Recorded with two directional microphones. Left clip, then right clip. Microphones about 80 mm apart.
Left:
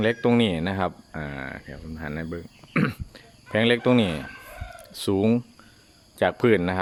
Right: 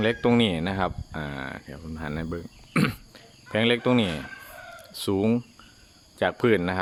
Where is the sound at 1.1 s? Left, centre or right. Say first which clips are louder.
Even; right.